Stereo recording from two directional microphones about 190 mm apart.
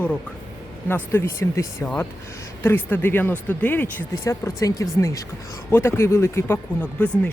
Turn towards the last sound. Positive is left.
turn(degrees=10)  # may be behind; listen again after turning